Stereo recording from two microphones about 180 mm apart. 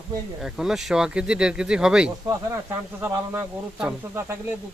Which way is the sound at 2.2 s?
20° right (ahead or behind).